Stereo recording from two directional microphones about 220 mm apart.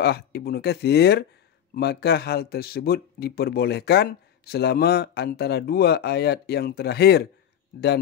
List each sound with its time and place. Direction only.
0.0 s speech: 45° left (ahead or behind)